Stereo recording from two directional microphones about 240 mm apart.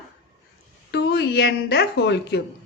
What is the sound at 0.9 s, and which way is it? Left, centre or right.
A woman's voice, left.